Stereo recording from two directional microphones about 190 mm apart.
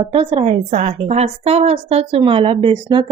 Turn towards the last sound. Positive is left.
turn(degrees=-25)  # may be behind; listen again after turning